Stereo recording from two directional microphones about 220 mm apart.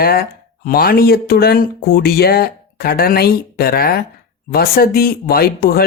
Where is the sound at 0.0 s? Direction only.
45° left (ahead or behind).